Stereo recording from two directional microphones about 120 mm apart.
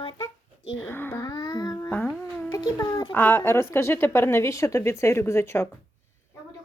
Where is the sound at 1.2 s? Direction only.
35° left (ahead or behind).